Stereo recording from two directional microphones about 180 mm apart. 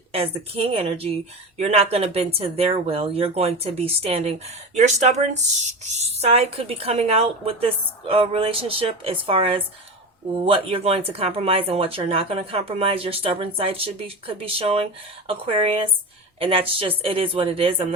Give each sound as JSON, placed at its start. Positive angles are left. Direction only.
{"t": 0.1, "sound": "speech", "side_deg": -35}